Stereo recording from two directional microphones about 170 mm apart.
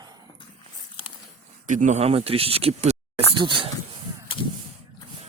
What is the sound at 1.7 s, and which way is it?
Speech, 45° right (ahead or behind).